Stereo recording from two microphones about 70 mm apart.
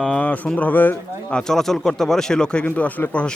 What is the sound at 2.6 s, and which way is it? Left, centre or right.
Speech, left.